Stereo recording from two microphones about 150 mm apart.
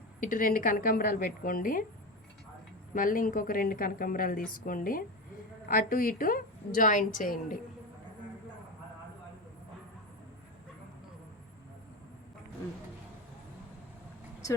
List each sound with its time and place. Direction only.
0.2 s a woman's voice: 65° left (ahead or behind)
2.9 s a woman's voice: 65° left (ahead or behind)